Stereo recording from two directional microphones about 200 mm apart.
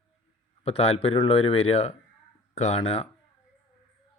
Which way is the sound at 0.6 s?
30° left (ahead or behind).